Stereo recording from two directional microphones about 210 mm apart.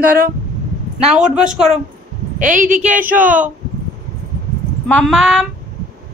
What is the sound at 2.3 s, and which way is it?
Speech, 40° right (ahead or behind).